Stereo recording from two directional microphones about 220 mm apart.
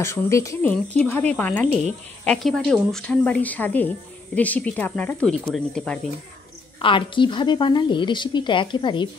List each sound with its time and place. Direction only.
0.0 s speech: 10° left (ahead or behind)
6.8 s a woman's voice: 25° left (ahead or behind)